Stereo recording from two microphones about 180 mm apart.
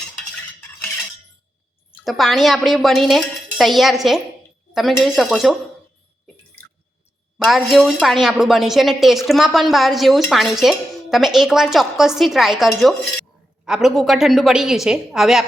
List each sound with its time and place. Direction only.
2.0 s speech: centre (ahead or behind)
7.3 s speech: centre (ahead or behind)